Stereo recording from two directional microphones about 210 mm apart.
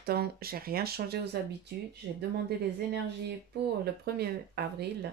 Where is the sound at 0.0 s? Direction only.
45° right (ahead or behind).